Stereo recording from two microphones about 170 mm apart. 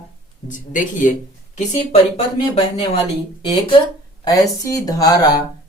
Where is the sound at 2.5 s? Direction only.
30° left (ahead or behind).